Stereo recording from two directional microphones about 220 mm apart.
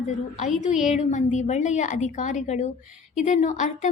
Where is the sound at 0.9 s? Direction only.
35° left (ahead or behind).